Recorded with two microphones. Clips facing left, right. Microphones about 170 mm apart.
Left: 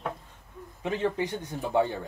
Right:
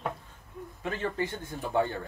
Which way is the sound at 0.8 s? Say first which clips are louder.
Left 4 dB; 20° left (ahead or behind).